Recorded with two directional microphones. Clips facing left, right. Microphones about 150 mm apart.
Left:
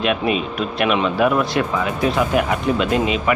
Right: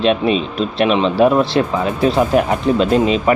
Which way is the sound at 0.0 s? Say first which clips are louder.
Right 4 dB; 30° right (ahead or behind).